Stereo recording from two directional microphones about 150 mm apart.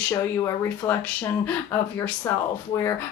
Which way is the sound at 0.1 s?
20° left (ahead or behind).